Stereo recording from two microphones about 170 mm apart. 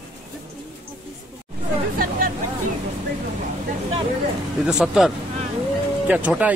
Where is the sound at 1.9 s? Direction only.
55° right (ahead or behind).